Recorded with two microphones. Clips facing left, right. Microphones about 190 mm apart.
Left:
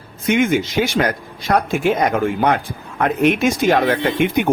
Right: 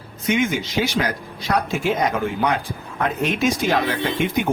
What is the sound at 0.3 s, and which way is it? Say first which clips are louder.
Speech: left 5 dB; 55° left (ahead or behind).